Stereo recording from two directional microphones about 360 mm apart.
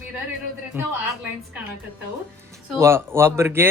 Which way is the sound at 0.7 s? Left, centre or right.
Centre.